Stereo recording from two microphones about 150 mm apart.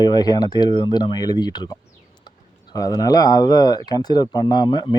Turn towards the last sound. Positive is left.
turn(degrees=30)  # may be behind; listen again after turning